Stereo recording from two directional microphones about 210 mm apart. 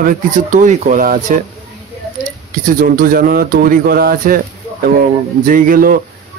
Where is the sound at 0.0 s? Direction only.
40° right (ahead or behind).